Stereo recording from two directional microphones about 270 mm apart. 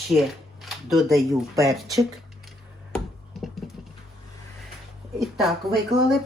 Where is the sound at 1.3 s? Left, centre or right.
Centre.